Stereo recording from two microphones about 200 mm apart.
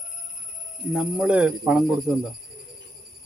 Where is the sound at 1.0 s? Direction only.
5° right (ahead or behind).